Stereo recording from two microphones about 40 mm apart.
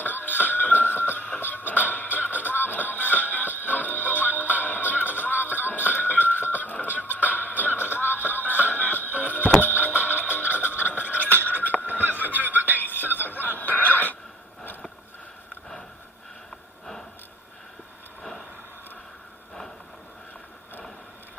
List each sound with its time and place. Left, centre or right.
0.0 s music: left
7.0 s music: right
7.3 s music: left
7.8 s music: left
11.7 s a sound: left
12.0 s snicker: right
12.6 s a sound: left
13.6 s music: left